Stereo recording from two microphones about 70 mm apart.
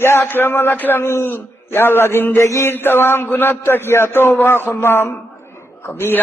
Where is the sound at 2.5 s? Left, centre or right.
Left.